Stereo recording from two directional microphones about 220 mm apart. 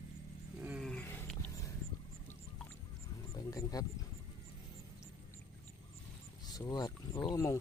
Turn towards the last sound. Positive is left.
turn(degrees=15)  # may be behind; listen again after turning